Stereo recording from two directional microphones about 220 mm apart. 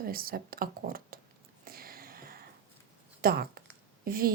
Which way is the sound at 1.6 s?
40° right (ahead or behind).